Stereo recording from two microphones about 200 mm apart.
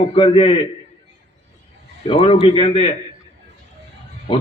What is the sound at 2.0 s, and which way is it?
Speech, 25° left (ahead or behind).